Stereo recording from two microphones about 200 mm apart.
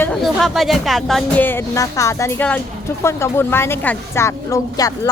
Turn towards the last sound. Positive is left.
turn(degrees=20)  # may be behind; listen again after turning